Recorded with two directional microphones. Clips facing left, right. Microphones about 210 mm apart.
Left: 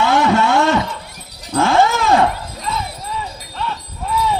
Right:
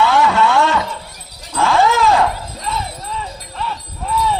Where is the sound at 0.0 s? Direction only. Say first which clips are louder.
Even; 45° left (ahead or behind).